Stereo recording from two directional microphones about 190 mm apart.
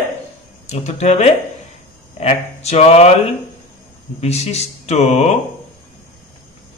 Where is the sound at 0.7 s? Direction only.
35° left (ahead or behind).